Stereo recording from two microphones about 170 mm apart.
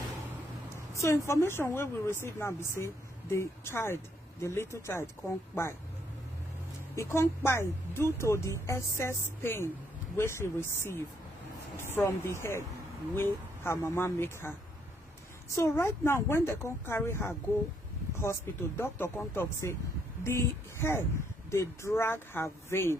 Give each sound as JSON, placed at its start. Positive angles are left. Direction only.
{"t": 0.9, "sound": "a woman's voice", "side_deg": 15}
{"t": 7.0, "sound": "a woman's voice", "side_deg": 15}
{"t": 15.5, "sound": "a woman's voice", "side_deg": 15}